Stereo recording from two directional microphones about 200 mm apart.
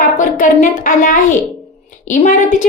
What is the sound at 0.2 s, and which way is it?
A child's voice, 40° left (ahead or behind).